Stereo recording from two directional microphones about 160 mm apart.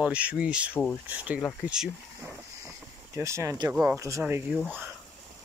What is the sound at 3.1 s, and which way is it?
Speech, 15° right (ahead or behind).